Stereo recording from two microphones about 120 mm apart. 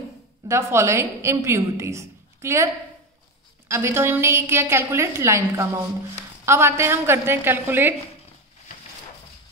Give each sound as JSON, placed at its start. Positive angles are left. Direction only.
{"t": 0.5, "sound": "a woman's voice", "side_deg": -20}